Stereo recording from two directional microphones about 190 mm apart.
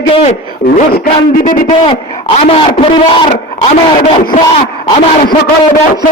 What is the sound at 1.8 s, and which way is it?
A man's voice, 30° left (ahead or behind).